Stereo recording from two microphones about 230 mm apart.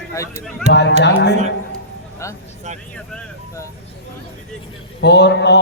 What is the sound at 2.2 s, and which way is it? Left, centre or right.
Speech, centre.